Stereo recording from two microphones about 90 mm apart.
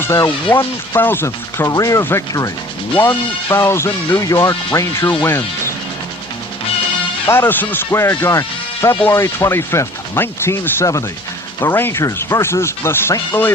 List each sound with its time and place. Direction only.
0.0 s speech: 30° left (ahead or behind)
1.7 s speech: 40° left (ahead or behind)
2.0 s speech: 25° left (ahead or behind)
4.2 s speech: 40° left (ahead or behind)
7.3 s speech: 25° left (ahead or behind)